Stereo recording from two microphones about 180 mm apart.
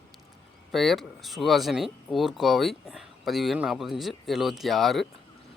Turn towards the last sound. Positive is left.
turn(degrees=0)  # may be behind; listen again after turning